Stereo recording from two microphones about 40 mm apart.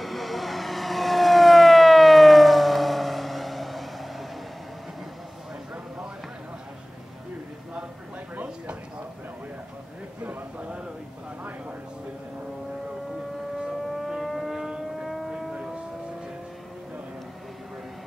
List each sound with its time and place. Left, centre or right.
0.0 s vehicle: centre
10.6 s a sound: right
13.8 s vehicle: centre
14.5 s vehicle: centre
15.0 s vehicle: centre